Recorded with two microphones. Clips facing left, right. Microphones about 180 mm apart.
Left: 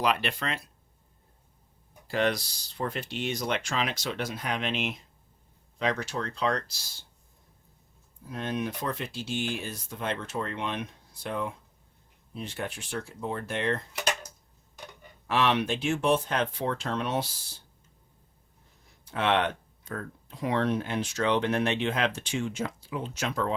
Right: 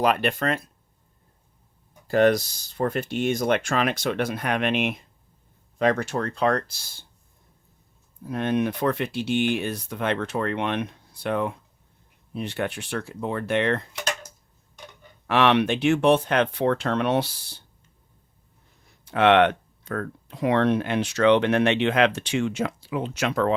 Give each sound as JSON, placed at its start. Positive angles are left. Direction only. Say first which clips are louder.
{"t": 0.0, "sound": "speech", "louder": "right 6 dB", "side_deg": -50}
{"t": 2.0, "sound": "speech", "louder": "right 9 dB", "side_deg": -45}
{"t": 8.3, "sound": "speech", "louder": "right 8 dB", "side_deg": -60}
{"t": 15.3, "sound": "speech", "louder": "right 6 dB", "side_deg": -65}
{"t": 19.0, "sound": "speech", "louder": "right 9 dB", "side_deg": -70}